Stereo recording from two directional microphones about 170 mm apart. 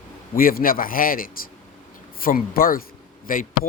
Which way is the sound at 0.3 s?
60° left (ahead or behind).